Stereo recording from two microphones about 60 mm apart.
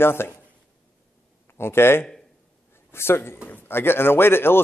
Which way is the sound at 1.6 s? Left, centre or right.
Left.